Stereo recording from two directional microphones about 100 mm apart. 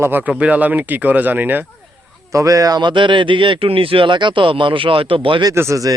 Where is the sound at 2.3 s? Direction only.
35° right (ahead or behind); by 5.4 s 60° right (ahead or behind).